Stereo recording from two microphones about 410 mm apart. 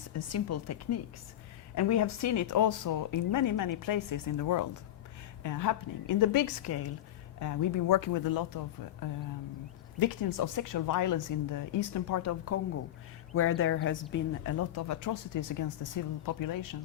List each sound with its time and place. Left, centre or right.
0.2 s a woman's voice: left
10.0 s a woman's voice: left